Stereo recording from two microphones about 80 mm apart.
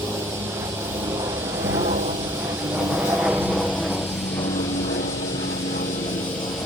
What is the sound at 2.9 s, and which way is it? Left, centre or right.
Vehicle, centre.